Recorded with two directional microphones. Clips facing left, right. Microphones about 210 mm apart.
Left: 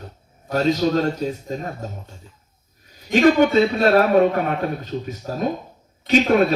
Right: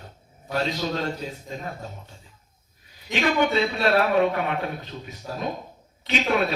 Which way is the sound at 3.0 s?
40° left (ahead or behind).